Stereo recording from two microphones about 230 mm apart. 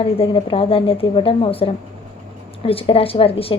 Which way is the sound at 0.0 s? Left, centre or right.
Left.